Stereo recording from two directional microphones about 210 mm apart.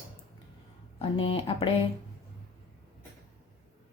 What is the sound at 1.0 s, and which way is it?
Speech, 25° left (ahead or behind).